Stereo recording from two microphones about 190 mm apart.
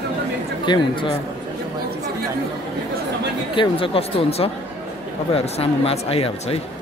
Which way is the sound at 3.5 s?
30° left (ahead or behind).